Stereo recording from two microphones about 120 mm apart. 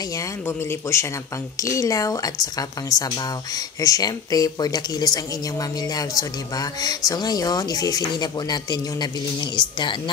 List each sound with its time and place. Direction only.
0.1 s speech: 25° left (ahead or behind)